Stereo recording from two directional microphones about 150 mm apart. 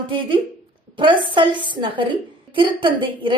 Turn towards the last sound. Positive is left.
turn(degrees=-35)  # may be behind; listen again after turning